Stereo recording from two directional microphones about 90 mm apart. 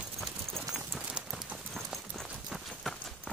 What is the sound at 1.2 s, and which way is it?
Clip-clop, centre (ahead or behind).